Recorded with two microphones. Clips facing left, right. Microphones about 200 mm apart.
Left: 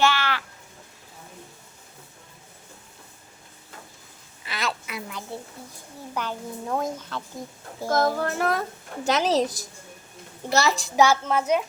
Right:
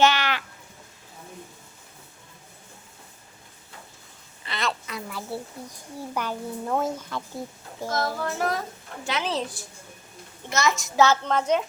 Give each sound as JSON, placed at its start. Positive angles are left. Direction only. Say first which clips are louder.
{"t": 0.0, "sound": "a sound", "louder": "right 2 dB", "side_deg": -20}
{"t": 4.4, "sound": "a sound", "louder": "right 1 dB", "side_deg": 5}
{"t": 5.1, "sound": "a child's voice", "louder": "right 3 dB", "side_deg": -10}
{"t": 7.9, "sound": "speech", "louder": "left 5 dB", "side_deg": 50}
{"t": 9.0, "sound": "a woman's voice", "louder": "left 6 dB", "side_deg": 40}
{"t": 10.9, "sound": "a woman's voice", "louder": "left 1 dB", "side_deg": 10}